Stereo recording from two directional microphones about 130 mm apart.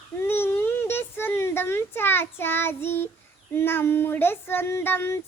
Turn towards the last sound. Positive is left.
turn(degrees=15)  # may be behind; listen again after turning